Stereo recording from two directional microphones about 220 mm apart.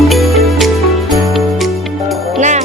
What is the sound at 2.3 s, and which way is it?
Music, 30° right (ahead or behind).